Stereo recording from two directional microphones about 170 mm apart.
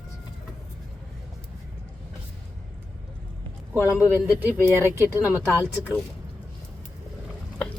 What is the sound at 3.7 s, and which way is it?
Speech, 15° left (ahead or behind).